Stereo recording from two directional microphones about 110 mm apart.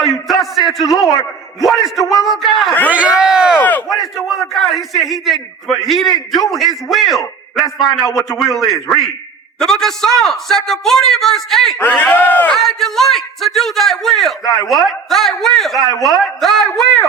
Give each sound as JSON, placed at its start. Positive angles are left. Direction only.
{"t": 0.0, "sound": "a sound", "side_deg": 0}
{"t": 1.6, "sound": "a man's voice", "side_deg": 0}
{"t": 2.9, "sound": "run", "side_deg": -10}
{"t": 3.6, "sound": "battle cry", "side_deg": 15}
{"t": 3.8, "sound": "a man's voice", "side_deg": 0}
{"t": 9.6, "sound": "a man's voice", "side_deg": 5}
{"t": 11.8, "sound": "speech", "side_deg": 15}
{"t": 12.5, "sound": "a man's voice", "side_deg": 5}